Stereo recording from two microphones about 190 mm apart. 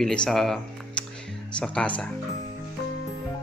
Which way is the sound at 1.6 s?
5° left (ahead or behind).